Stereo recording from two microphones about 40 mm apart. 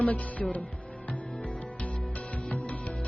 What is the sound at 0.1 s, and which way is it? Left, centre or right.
Speech, left.